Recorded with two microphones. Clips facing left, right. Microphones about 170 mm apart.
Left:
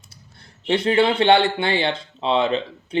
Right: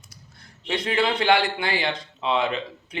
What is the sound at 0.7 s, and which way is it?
A man's voice, 30° left (ahead or behind).